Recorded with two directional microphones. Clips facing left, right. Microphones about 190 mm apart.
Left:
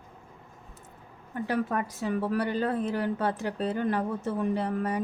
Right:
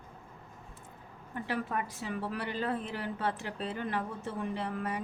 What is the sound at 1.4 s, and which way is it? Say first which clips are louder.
A woman's voice: left 6 dB; 40° left (ahead or behind).